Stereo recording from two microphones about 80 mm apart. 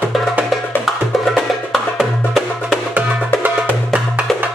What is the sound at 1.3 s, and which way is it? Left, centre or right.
Music, centre.